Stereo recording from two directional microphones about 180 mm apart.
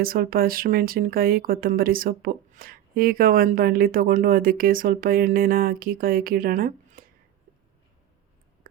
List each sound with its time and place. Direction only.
0.0 s speech: 55° right (ahead or behind)